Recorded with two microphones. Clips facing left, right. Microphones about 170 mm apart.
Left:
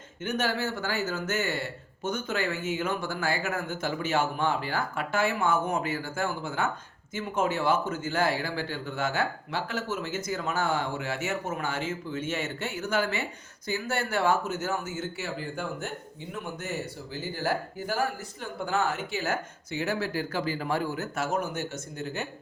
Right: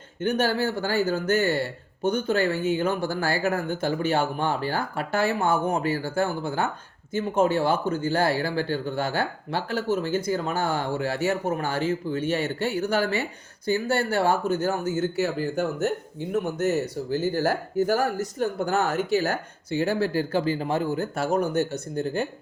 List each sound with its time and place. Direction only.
0.2 s speech: 35° right (ahead or behind)